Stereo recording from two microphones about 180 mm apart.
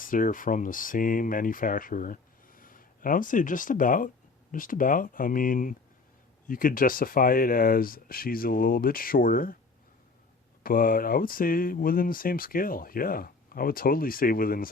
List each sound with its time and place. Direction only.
0.0 s speech: 50° left (ahead or behind)
10.6 s speech: 50° left (ahead or behind)